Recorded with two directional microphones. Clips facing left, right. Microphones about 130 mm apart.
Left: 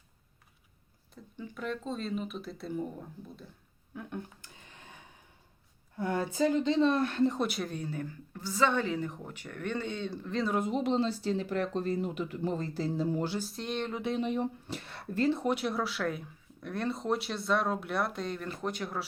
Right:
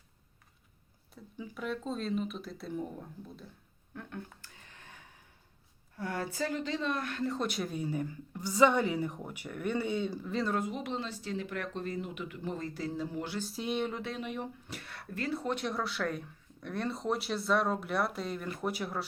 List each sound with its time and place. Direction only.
1.1 s speech: 5° right (ahead or behind)
3.9 s a sound: 15° left (ahead or behind)
6.0 s speech: 20° left (ahead or behind)
7.3 s a woman's voice: centre (ahead or behind)
10.5 s speech: 25° left (ahead or behind)
13.4 s speech: 5° right (ahead or behind)
14.0 s speech: 25° left (ahead or behind)
15.4 s speech: 5° left (ahead or behind)